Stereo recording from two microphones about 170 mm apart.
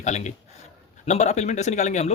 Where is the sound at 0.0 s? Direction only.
45° left (ahead or behind).